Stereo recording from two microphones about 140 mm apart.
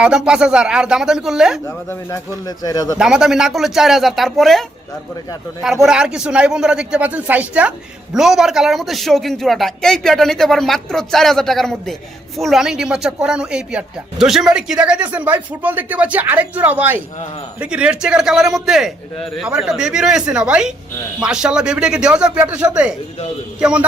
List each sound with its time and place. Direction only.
0.0 s a man's voice: 5° right (ahead or behind)
1.6 s speech: 20° left (ahead or behind)
3.0 s a man's voice: 5° right (ahead or behind)
5.8 s a man's voice: 5° right (ahead or behind)